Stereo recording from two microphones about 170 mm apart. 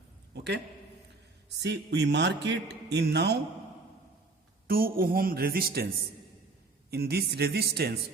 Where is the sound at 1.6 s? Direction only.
90° right; by 3.3 s 75° right (ahead or behind).